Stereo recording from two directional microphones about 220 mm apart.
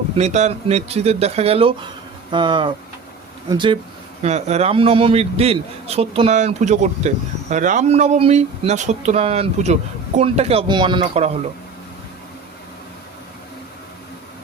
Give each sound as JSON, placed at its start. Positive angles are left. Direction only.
{"t": 0.2, "sound": "a man's voice", "side_deg": -30}